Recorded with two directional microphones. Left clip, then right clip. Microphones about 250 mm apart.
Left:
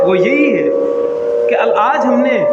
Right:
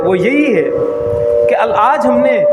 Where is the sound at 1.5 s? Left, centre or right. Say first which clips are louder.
Right 1 dB; right.